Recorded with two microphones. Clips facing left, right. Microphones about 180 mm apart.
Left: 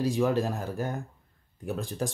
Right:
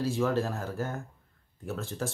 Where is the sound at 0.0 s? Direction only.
15° left (ahead or behind).